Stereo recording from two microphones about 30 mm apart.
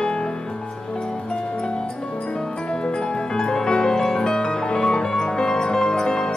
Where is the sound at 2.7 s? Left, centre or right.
Left.